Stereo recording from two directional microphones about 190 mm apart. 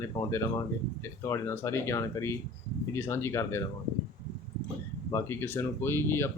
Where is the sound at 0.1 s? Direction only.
25° left (ahead or behind).